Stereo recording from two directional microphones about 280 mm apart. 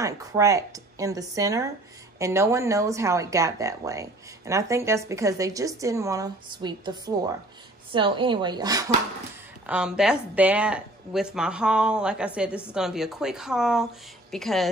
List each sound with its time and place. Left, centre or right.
0.0 s speech: centre
9.7 s a woman's voice: centre